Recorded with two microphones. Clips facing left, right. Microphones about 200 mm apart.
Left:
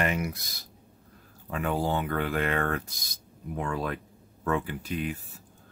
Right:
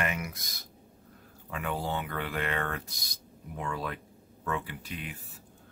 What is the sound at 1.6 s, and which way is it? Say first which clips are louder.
Speech: left 5 dB; 45° left (ahead or behind).